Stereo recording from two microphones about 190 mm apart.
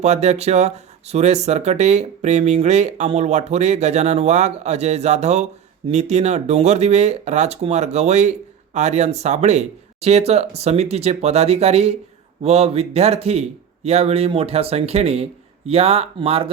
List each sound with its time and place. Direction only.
0.0 s speech: 35° right (ahead or behind)